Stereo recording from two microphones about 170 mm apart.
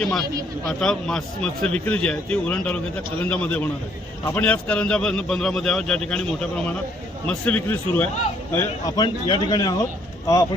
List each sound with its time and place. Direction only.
0.0 s a man's voice: centre (ahead or behind)
7.3 s a man's voice: 10° left (ahead or behind)
8.5 s a man's voice: 20° left (ahead or behind)